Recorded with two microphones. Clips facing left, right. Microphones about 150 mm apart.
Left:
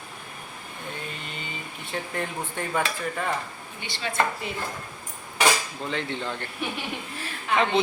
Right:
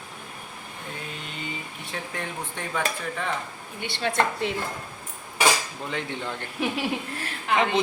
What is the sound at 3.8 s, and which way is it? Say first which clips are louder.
Speech: right 2 dB; 60° right (ahead or behind).